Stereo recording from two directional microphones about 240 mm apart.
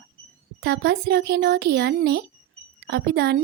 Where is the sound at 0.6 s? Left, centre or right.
Right.